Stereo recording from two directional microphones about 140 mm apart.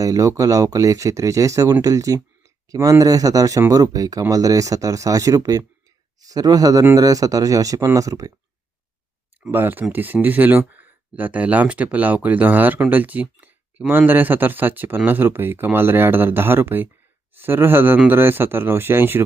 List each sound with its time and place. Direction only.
0.0 s speech: 25° right (ahead or behind)
9.5 s speech: 15° right (ahead or behind)